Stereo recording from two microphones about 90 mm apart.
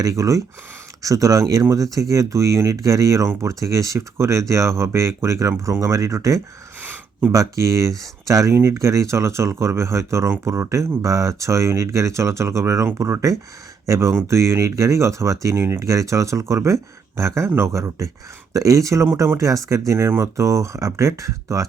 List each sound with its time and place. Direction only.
0.0 s speech: 40° right (ahead or behind)
6.8 s a sound: 20° right (ahead or behind)
7.3 s speech: 35° right (ahead or behind)